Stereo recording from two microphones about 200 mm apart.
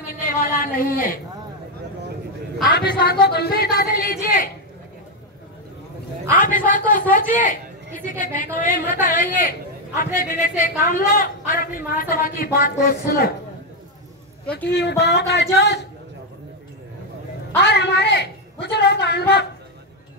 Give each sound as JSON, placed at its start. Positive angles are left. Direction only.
{"t": 0.1, "sound": "a sound", "side_deg": 45}
{"t": 2.7, "sound": "speech", "side_deg": 50}
{"t": 6.3, "sound": "a man's voice", "side_deg": 40}
{"t": 14.4, "sound": "a man's voice", "side_deg": 5}
{"t": 14.7, "sound": "speech", "side_deg": 55}
{"t": 17.6, "sound": "a man's voice", "side_deg": 55}